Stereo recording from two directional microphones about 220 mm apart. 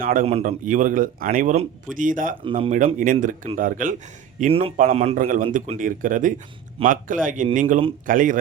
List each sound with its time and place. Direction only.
0.0 s speech: 40° right (ahead or behind)
2.4 s speech: 25° right (ahead or behind)